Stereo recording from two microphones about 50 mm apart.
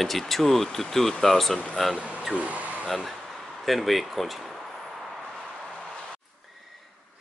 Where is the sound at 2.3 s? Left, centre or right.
Right.